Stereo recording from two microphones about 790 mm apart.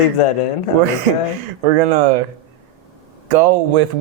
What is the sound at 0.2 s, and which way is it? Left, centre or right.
Speech, left.